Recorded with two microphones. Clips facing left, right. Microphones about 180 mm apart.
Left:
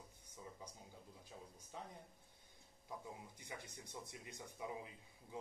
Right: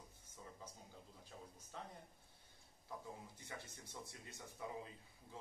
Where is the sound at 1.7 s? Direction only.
15° left (ahead or behind).